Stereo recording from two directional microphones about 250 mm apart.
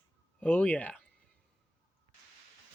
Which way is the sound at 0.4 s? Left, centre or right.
Centre.